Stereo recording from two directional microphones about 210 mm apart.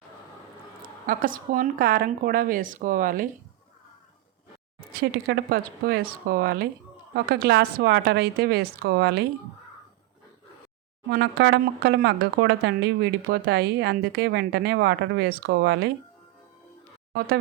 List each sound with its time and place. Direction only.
1.0 s a woman's voice: 40° right (ahead or behind)
4.9 s speech: 45° right (ahead or behind)
11.1 s speech: 50° right (ahead or behind)
17.1 s speech: 45° right (ahead or behind)